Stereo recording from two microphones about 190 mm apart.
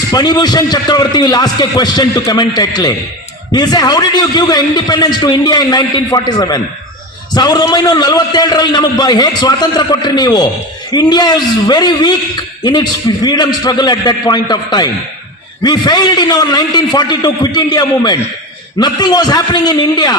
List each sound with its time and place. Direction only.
0.1 s a man's voice: 20° left (ahead or behind)